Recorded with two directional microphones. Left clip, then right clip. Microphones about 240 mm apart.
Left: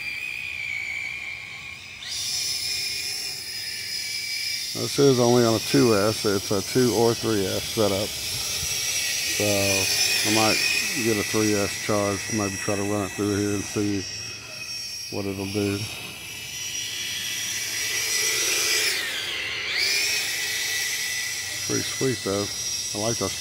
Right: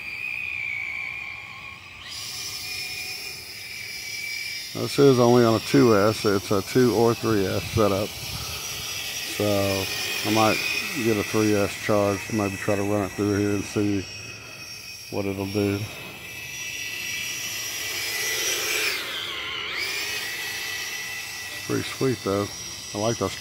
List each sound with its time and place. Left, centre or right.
2.3 s a sound: centre
4.8 s speech: centre
5.9 s speech: centre
9.5 s speech: centre
9.8 s a sound: centre
10.5 s speech: centre
11.6 s speech: centre
15.1 s speech: centre
17.4 s a sound: centre
22.2 s speech: centre